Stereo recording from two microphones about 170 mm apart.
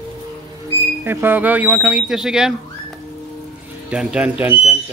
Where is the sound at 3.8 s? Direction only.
5° right (ahead or behind).